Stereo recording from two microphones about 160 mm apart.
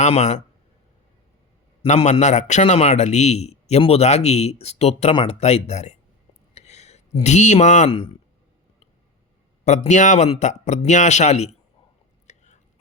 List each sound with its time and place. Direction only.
0.0 s speech: 45° left (ahead or behind)
1.8 s a man's voice: 40° left (ahead or behind)
6.5 s a sound: 45° left (ahead or behind)
7.9 s speech: 35° left (ahead or behind)
9.6 s a man's voice: 45° left (ahead or behind)